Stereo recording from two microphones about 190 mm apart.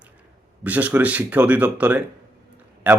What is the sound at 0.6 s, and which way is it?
Speech, 10° right (ahead or behind).